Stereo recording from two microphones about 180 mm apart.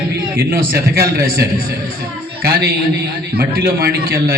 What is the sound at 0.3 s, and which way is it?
A man's voice, 55° right (ahead or behind).